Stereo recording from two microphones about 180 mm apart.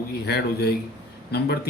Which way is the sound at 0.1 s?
65° left (ahead or behind).